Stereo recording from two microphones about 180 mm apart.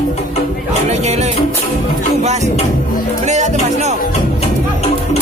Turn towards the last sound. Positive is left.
turn(degrees=-40)  # may be behind; listen again after turning